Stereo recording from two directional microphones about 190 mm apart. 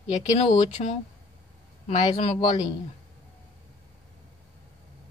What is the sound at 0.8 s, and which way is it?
Speech, 40° left (ahead or behind).